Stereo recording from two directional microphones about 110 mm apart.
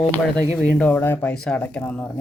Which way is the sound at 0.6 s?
15° left (ahead or behind).